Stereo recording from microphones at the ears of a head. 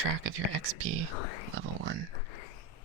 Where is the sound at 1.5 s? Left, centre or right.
Right.